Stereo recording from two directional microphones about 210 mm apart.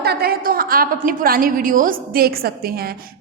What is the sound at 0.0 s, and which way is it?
A woman's voice, 50° right (ahead or behind).